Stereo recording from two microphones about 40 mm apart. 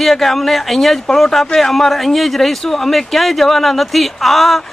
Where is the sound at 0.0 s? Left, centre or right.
Centre.